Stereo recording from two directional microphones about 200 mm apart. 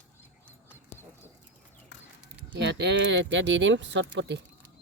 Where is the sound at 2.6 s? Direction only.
60° right (ahead or behind).